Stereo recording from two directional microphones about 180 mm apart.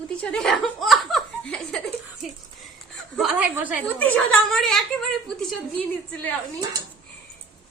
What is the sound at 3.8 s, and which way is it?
Speech, 5° left (ahead or behind).